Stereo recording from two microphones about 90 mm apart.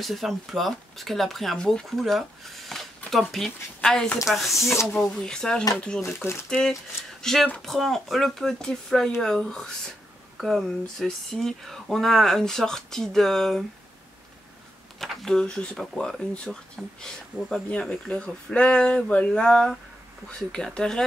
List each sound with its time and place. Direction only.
0.0 s speech: centre (ahead or behind)
4.6 s speech: 35° left (ahead or behind)
5.2 s speech: 10° left (ahead or behind)
15.0 s speech: 5° left (ahead or behind)